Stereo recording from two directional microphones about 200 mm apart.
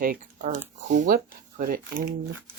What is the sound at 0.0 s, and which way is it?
Speech, 45° right (ahead or behind).